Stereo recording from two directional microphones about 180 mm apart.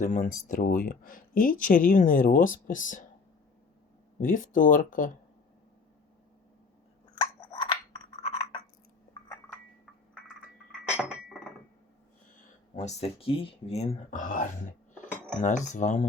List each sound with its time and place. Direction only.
0.0 s speech: 45° left (ahead or behind)
4.2 s speech: 45° left (ahead or behind)
7.2 s scissors: 25° left (ahead or behind)
10.8 s chink: 5° right (ahead or behind)
12.8 s speech: 35° left (ahead or behind)